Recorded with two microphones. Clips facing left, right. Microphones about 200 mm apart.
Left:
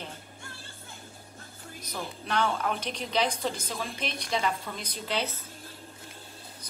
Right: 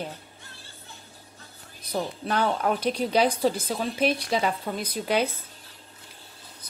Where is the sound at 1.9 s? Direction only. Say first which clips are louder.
Right 4 dB; 40° right (ahead or behind).